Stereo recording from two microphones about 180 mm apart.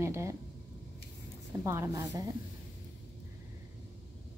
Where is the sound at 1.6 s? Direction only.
15° right (ahead or behind).